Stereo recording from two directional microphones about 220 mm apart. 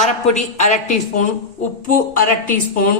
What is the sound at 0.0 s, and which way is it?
Speech, 30° left (ahead or behind).